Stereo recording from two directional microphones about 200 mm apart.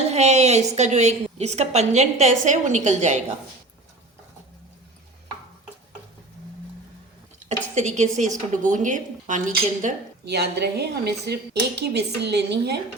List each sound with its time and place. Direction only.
0.1 s a woman's voice: 35° right (ahead or behind)
7.3 s a sound: 35° right (ahead or behind)
8.6 s a woman's voice: 40° right (ahead or behind)
10.2 s a woman's voice: 55° right (ahead or behind)